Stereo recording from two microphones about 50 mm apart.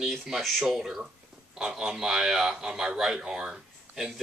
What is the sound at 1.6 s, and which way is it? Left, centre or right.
Speech, centre.